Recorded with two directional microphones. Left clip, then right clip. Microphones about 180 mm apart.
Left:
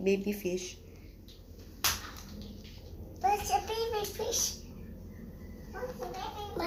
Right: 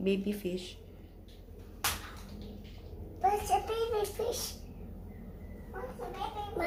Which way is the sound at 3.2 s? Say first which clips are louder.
Even; 15° right (ahead or behind).